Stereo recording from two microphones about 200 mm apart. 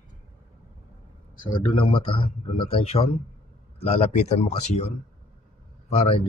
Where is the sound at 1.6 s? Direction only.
25° left (ahead or behind).